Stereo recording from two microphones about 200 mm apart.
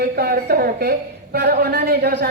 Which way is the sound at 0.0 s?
50° right (ahead or behind).